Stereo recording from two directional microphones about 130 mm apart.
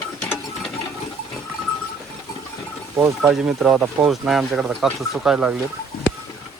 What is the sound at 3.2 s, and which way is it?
Speech, 5° right (ahead or behind).